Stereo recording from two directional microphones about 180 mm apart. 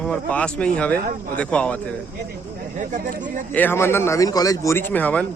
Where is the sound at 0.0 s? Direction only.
5° left (ahead or behind).